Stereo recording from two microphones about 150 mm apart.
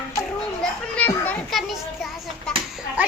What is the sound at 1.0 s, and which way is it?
Children playing, 10° left (ahead or behind).